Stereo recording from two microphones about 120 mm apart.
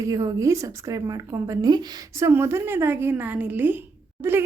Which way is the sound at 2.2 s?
20° right (ahead or behind).